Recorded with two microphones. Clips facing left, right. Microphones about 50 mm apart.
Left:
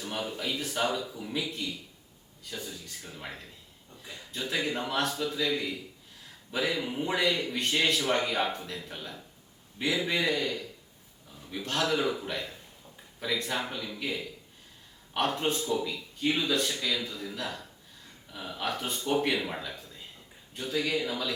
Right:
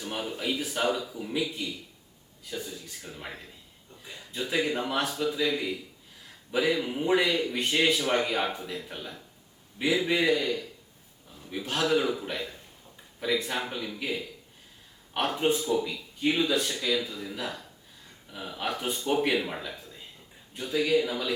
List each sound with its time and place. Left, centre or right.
0.3 s a man's voice: centre
15.1 s a man's voice: centre